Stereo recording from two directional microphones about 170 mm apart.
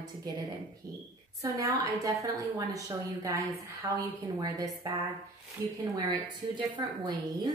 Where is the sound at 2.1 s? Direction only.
20° right (ahead or behind).